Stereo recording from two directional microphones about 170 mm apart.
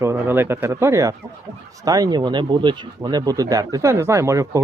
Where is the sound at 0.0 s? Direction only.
15° right (ahead or behind).